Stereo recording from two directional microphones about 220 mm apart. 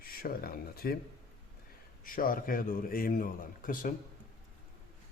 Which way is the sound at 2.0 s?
40° left (ahead or behind).